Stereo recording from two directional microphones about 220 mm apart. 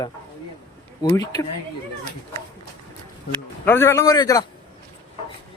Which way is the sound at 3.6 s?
10° left (ahead or behind).